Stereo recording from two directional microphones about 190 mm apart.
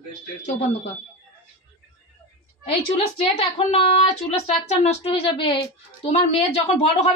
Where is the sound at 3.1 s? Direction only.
30° left (ahead or behind).